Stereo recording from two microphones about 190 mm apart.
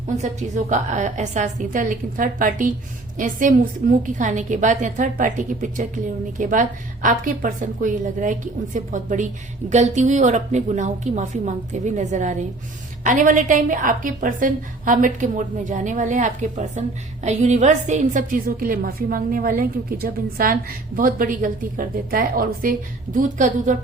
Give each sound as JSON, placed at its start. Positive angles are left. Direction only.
{"t": 0.2, "sound": "a woman's voice", "side_deg": -40}